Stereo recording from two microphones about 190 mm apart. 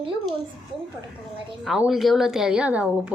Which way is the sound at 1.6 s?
Centre (ahead or behind).